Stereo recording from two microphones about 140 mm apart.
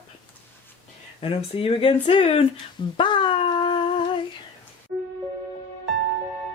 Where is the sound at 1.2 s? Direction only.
40° left (ahead or behind).